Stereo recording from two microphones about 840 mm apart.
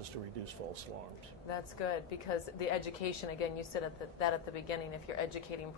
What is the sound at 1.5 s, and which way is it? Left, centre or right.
A woman's voice, left.